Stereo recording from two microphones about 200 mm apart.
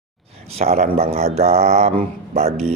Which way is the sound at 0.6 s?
35° right (ahead or behind).